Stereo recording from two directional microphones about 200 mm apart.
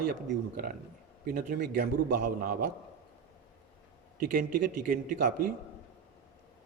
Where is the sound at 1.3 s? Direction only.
50° right (ahead or behind).